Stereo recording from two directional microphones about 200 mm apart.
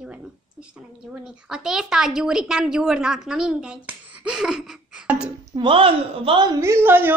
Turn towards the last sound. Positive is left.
turn(degrees=-10)  # may be behind; listen again after turning